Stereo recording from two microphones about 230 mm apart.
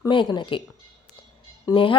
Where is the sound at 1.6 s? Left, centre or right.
Left.